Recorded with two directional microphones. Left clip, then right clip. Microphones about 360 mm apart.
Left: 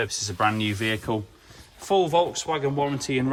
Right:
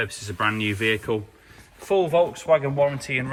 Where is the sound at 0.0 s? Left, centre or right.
Centre.